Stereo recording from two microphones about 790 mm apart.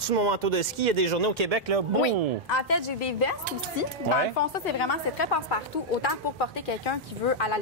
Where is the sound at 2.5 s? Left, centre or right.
Left.